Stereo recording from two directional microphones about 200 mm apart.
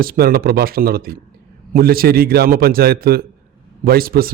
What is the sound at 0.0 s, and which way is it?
Speech, 45° right (ahead or behind).